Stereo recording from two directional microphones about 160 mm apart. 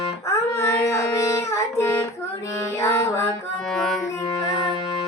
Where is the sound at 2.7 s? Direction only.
15° left (ahead or behind).